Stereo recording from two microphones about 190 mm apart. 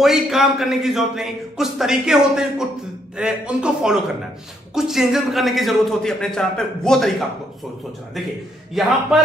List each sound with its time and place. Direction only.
0.0 s a man's voice: centre (ahead or behind)
8.8 s a man's voice: centre (ahead or behind)